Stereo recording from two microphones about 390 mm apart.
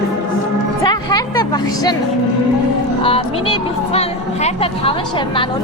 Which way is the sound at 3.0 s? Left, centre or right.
Centre.